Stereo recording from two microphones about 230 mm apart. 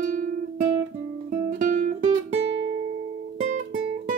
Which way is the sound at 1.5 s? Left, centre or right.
Right.